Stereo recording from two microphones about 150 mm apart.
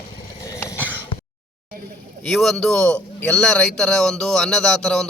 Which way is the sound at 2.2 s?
Centre (ahead or behind).